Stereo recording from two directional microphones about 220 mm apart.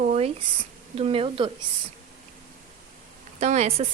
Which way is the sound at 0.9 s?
25° right (ahead or behind).